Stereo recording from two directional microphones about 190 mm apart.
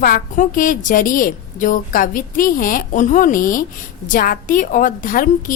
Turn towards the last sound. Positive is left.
turn(degrees=45)  # may be behind; listen again after turning